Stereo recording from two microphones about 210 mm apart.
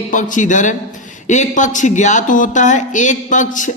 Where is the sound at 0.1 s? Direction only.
35° left (ahead or behind).